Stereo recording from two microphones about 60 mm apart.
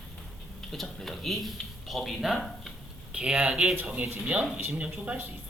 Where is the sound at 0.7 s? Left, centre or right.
Centre.